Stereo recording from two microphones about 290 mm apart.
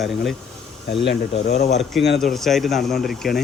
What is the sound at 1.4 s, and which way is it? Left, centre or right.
Speech, left.